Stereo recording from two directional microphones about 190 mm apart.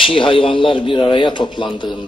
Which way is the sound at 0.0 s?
25° left (ahead or behind).